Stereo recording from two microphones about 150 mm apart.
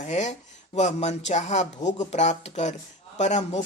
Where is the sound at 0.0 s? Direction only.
50° left (ahead or behind).